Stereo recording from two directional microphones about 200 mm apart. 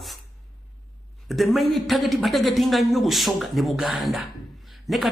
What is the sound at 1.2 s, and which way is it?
A man's voice, centre (ahead or behind).